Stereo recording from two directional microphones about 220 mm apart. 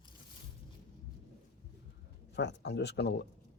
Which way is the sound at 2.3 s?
50° left (ahead or behind).